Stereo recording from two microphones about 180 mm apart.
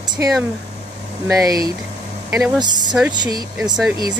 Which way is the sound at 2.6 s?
25° right (ahead or behind).